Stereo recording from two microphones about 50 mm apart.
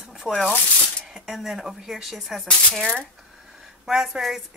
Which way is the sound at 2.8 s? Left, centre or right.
Centre.